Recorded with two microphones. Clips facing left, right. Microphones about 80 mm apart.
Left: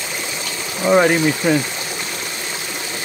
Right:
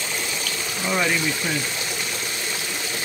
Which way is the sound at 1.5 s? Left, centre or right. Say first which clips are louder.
Left 10 dB; left.